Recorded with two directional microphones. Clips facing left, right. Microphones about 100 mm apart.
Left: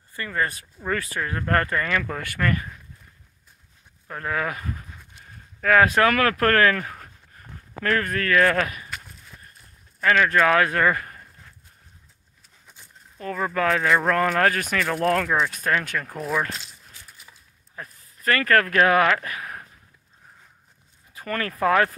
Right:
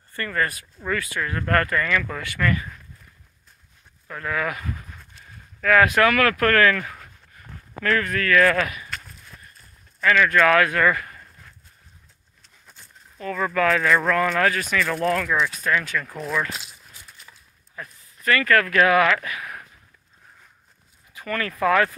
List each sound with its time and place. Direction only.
0.1 s speech: 15° left (ahead or behind)
0.8 s speech: 35° left (ahead or behind)
4.1 s speech: 35° left (ahead or behind)
8.9 s a sound: 15° left (ahead or behind)
9.9 s speech: 35° left (ahead or behind)
13.2 s speech: 25° left (ahead or behind)
14.0 s speech: 40° left (ahead or behind)
15.2 s speech: 35° left (ahead or behind)
15.5 s speech: 50° left (ahead or behind)
17.8 s speech: 35° left (ahead or behind)
21.1 s speech: 35° left (ahead or behind)